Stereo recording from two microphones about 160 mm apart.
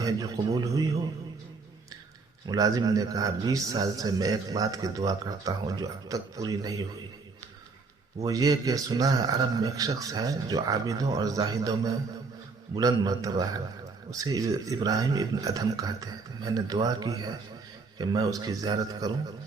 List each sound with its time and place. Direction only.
0.0 s speech: 25° right (ahead or behind)
2.5 s speech: 25° right (ahead or behind)
8.2 s speech: 25° right (ahead or behind)